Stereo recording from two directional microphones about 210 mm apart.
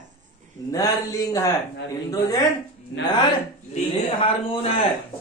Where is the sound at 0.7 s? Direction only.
15° left (ahead or behind).